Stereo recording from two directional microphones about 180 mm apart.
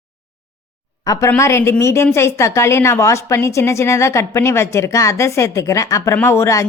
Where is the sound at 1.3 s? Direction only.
15° left (ahead or behind).